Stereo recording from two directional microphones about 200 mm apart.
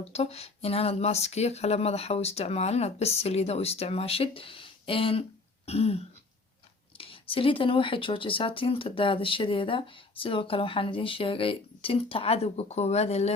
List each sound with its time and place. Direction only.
0.0 s speech: 30° left (ahead or behind)